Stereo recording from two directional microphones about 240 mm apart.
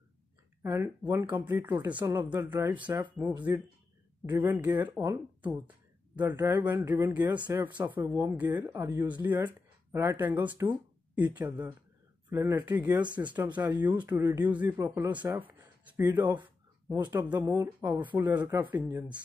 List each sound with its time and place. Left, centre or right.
0.7 s speech: centre
13.0 s speech: centre